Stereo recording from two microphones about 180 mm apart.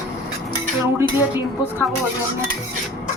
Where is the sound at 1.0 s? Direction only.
10° right (ahead or behind).